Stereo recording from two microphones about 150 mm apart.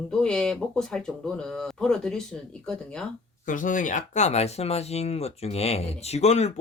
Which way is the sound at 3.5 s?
60° left (ahead or behind).